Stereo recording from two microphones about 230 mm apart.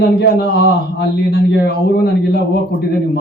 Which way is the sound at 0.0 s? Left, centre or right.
Left.